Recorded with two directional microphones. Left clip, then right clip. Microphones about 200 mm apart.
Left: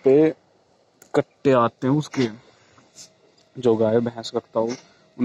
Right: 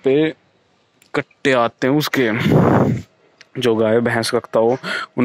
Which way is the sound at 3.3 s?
20° right (ahead or behind).